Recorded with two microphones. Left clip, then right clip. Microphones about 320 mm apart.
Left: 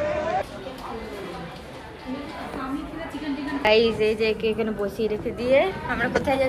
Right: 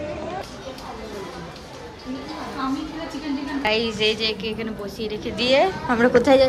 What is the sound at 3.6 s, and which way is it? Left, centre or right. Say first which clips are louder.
A woman's voice: left 3 dB; centre.